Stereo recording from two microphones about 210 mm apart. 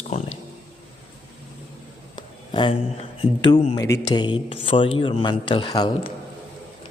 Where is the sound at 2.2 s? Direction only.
25° left (ahead or behind).